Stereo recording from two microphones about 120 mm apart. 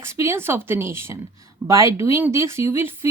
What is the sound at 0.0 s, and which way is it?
Speech, 20° right (ahead or behind).